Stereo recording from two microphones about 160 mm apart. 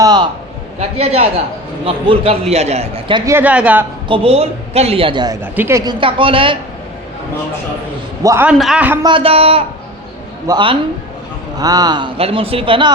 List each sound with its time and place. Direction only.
0.8 s a man's voice: 40° right (ahead or behind)
3.2 s speech: 10° right (ahead or behind)
4.1 s a man's voice: 35° right (ahead or behind)
5.4 s a man's voice: 15° right (ahead or behind); by 6.6 s 35° right (ahead or behind)
8.2 s a man's voice: 20° right (ahead or behind)
8.4 s a man's voice: centre (ahead or behind)
9.0 s a man's voice: 35° right (ahead or behind)